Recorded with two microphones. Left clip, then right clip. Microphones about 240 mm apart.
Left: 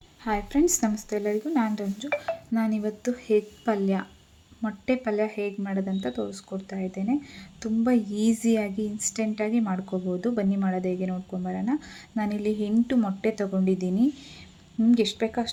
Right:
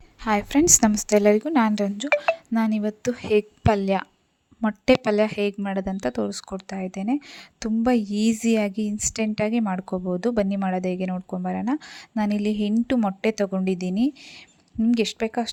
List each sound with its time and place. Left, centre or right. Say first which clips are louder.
0.3 s a woman's voice: right 5 dB; right